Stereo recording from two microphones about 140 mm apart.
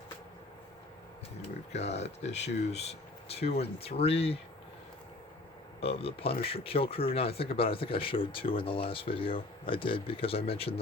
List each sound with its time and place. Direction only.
1.7 s speech: 50° left (ahead or behind)
5.8 s speech: 45° left (ahead or behind)